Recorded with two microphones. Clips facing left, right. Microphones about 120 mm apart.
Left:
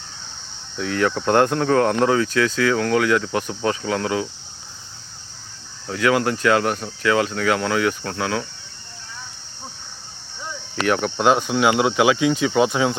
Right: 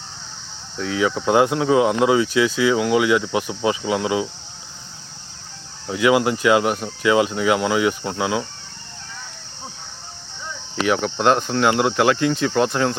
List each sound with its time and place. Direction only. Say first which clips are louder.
0.8 s speech: even; 5° right (ahead or behind)
5.9 s speech: right 2 dB; 15° right (ahead or behind)
10.8 s speech: even; centre (ahead or behind)